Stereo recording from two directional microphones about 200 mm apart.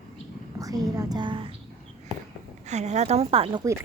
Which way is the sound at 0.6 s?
15° right (ahead or behind).